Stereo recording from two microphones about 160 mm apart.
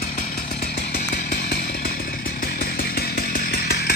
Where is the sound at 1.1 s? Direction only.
70° left (ahead or behind).